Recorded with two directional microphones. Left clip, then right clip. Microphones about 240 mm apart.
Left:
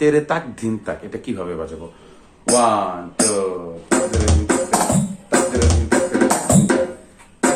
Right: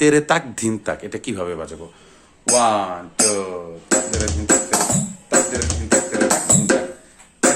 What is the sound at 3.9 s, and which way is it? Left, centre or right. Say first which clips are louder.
Music: left 2 dB; right.